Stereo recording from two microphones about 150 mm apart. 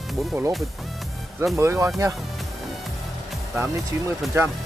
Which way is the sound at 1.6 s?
20° right (ahead or behind).